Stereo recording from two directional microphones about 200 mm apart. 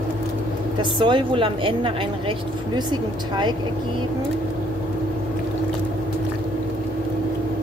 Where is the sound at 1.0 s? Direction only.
25° right (ahead or behind).